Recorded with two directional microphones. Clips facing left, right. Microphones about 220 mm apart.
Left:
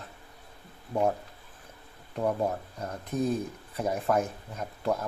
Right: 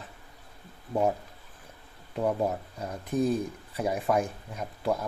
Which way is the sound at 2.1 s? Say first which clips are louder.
Right 1 dB; centre (ahead or behind).